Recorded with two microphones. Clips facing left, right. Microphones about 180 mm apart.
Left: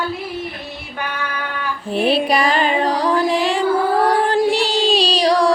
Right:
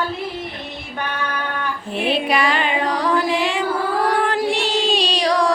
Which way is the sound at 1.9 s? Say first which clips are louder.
Left 4 dB; 35° left (ahead or behind).